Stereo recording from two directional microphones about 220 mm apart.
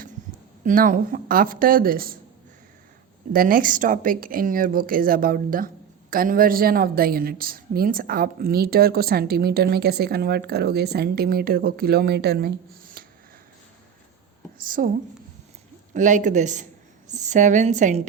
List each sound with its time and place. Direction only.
0.6 s a woman's voice: 35° right (ahead or behind)
3.3 s speech: 40° right (ahead or behind)
14.8 s a woman's voice: 40° right (ahead or behind)